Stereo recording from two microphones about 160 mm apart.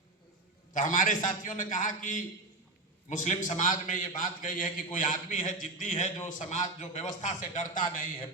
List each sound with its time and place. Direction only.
0.7 s a man's voice: 55° left (ahead or behind)